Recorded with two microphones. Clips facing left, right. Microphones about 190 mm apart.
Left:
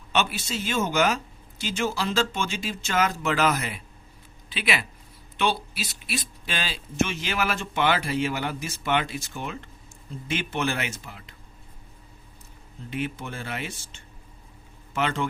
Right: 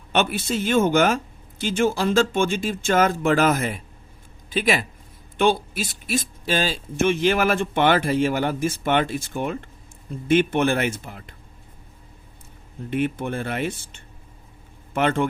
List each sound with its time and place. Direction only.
0.1 s speech: 55° right (ahead or behind)
12.9 s speech: 55° right (ahead or behind)